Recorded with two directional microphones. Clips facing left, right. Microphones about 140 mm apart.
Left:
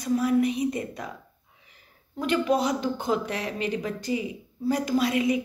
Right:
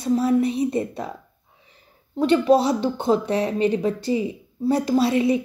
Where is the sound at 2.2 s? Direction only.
30° right (ahead or behind).